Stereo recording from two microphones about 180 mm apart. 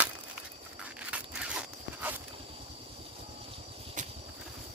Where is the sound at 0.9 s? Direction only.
5° right (ahead or behind).